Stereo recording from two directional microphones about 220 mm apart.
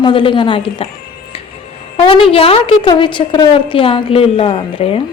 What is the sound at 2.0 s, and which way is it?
Speech, 25° left (ahead or behind).